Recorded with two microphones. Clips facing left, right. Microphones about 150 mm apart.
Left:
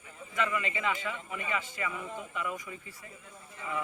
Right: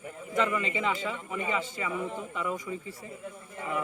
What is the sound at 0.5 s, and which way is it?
Speech, 25° right (ahead or behind).